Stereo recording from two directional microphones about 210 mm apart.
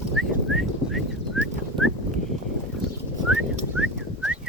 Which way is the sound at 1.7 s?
25° right (ahead or behind).